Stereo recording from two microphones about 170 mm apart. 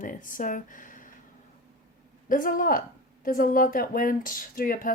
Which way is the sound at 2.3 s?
55° left (ahead or behind).